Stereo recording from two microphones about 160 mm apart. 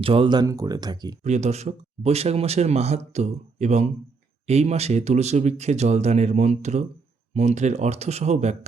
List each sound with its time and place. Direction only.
0.0 s speech: 35° right (ahead or behind)
1.2 s speech: 45° right (ahead or behind)